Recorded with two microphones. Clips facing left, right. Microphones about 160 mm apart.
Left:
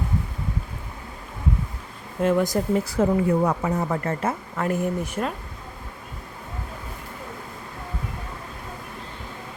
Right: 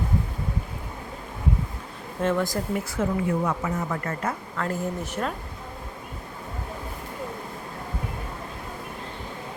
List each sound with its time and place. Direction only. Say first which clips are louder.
2.2 s speech: left 4 dB; 15° left (ahead or behind)
2.9 s a woman's voice: left 4 dB; 35° left (ahead or behind); by 5.2 s 15° left (ahead or behind)